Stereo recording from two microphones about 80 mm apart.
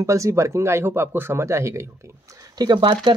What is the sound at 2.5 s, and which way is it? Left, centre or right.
Speech, right.